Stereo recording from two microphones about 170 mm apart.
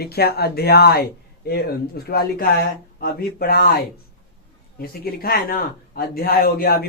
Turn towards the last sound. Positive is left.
turn(degrees=60)  # may be behind; listen again after turning